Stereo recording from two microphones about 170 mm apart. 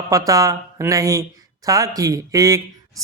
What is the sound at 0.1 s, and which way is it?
Speech, 20° right (ahead or behind).